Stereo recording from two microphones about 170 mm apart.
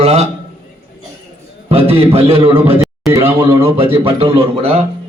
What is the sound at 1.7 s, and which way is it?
Speech, 35° right (ahead or behind).